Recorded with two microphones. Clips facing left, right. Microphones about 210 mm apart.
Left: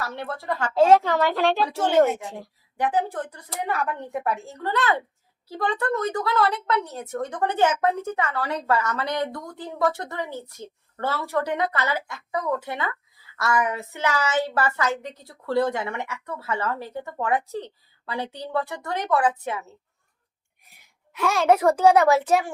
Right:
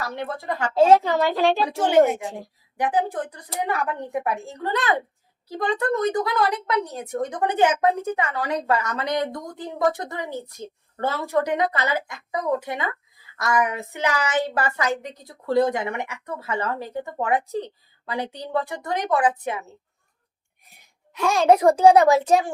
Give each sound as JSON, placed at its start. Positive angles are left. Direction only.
{"t": 0.0, "sound": "speech", "side_deg": -15}
{"t": 21.5, "sound": "speech", "side_deg": -15}